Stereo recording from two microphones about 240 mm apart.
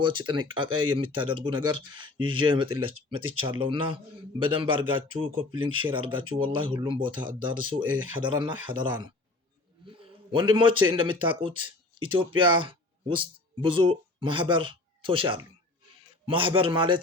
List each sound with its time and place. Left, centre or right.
0.0 s speech: centre